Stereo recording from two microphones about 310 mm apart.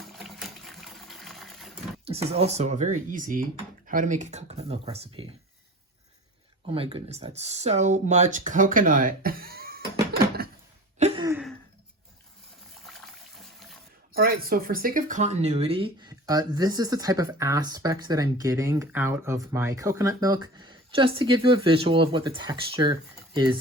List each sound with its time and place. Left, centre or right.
0.0 s sewing machine: centre
2.0 s speech: centre
6.7 s speech: centre
10.9 s a sound: right
11.3 s a sound: centre
12.9 s trickle: centre
14.1 s speech: right